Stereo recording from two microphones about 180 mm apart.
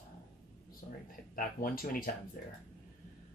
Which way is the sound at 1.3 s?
50° left (ahead or behind).